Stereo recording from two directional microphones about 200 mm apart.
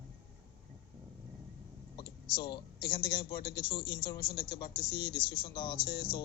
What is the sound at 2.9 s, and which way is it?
Speech, 50° left (ahead or behind).